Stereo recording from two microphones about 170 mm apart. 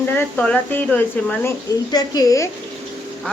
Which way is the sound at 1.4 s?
25° left (ahead or behind).